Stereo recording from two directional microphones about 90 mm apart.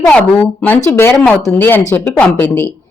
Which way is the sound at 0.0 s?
15° left (ahead or behind).